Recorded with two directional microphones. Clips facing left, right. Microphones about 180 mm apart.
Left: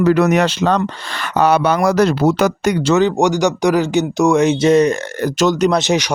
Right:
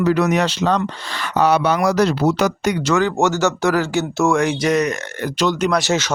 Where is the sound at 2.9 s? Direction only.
20° left (ahead or behind).